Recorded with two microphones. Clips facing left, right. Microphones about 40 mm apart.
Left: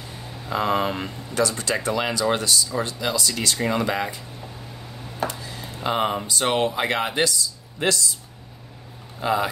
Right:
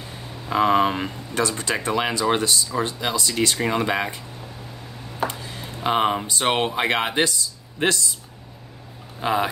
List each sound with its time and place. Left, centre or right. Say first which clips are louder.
0.5 s speech: right 4 dB; right
5.2 s a sound: right 1 dB; right
6.2 s speech: even; right
9.2 s speech: even; right